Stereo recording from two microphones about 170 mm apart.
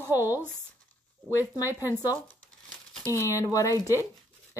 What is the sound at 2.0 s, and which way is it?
Crumpling, 15° left (ahead or behind).